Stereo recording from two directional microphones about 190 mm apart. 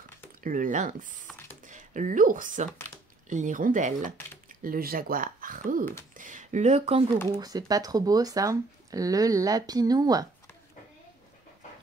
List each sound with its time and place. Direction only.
0.4 s speech: 45° right (ahead or behind)
1.2 s computer keyboard: 10° left (ahead or behind)
1.6 s speech: 40° right (ahead or behind)
7.2 s speech: 20° right (ahead or behind)